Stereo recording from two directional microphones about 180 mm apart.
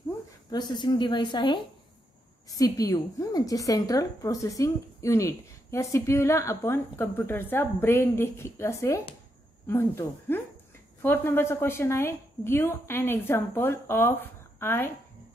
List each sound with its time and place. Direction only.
0.5 s a woman's voice: 25° left (ahead or behind)